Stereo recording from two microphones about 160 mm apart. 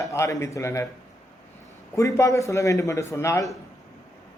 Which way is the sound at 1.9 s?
20° left (ahead or behind).